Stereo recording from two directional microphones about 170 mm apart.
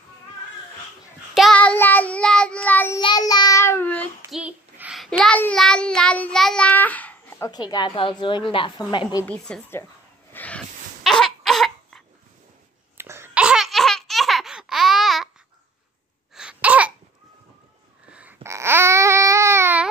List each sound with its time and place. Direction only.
1.3 s child singing: centre (ahead or behind)
3.0 s child singing: 25° left (ahead or behind)
4.3 s child singing: 5° right (ahead or behind); by 9.2 s 25° left (ahead or behind)
9.2 s a woman's voice: 5° left (ahead or behind)
10.3 s a sound: 10° left (ahead or behind)
11.1 s cough: centre (ahead or behind)
12.9 s laughter: 15° right (ahead or behind)
16.3 s babbling: 5° right (ahead or behind)
18.1 s babbling: 10° right (ahead or behind)